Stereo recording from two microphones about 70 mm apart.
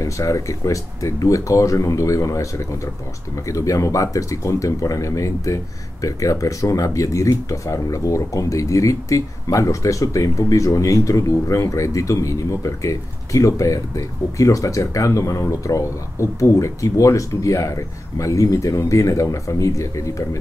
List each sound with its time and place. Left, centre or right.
0.0 s speech: left